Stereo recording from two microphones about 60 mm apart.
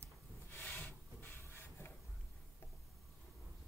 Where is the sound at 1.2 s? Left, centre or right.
Left.